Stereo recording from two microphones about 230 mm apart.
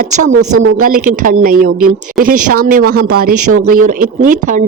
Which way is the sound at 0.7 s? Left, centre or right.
Right.